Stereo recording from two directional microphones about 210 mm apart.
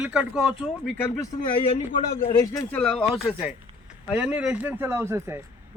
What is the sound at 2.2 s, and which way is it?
Speech, 25° left (ahead or behind).